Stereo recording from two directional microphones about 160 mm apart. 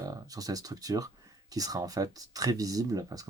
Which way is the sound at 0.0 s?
20° right (ahead or behind).